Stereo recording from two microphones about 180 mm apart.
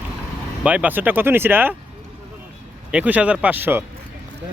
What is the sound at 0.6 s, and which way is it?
Speech, 10° right (ahead or behind).